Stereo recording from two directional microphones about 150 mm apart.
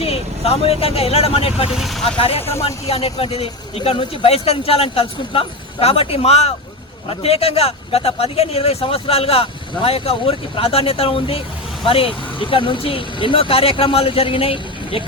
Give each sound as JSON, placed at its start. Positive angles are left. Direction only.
{"t": 0.0, "sound": "speech", "side_deg": 40}
{"t": 1.7, "sound": "speech", "side_deg": 0}
{"t": 2.0, "sound": "a man's voice", "side_deg": 40}